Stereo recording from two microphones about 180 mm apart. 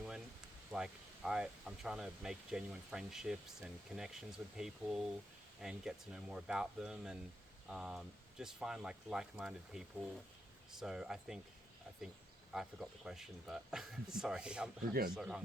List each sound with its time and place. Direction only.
0.0 s speech: 5° right (ahead or behind)
12.5 s speech: centre (ahead or behind)